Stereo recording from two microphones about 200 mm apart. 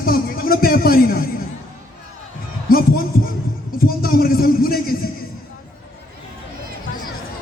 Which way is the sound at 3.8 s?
45° left (ahead or behind).